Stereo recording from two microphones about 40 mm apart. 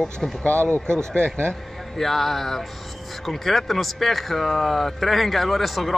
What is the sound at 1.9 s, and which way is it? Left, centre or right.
A man's voice, centre.